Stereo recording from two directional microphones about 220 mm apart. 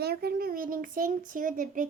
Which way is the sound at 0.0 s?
45° right (ahead or behind).